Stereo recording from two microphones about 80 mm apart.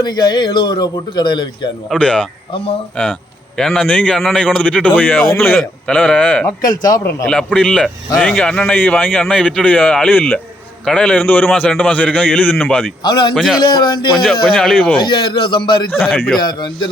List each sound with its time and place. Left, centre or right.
0.0 s a man's voice: left
1.9 s a man's voice: centre
6.7 s a man's voice: left
7.3 s a man's voice: centre
13.0 s a man's voice: left
13.3 s speech: centre
13.6 s a man's voice: left
14.4 s speech: centre
14.9 s a man's voice: left
15.9 s speech: centre
16.4 s a man's voice: left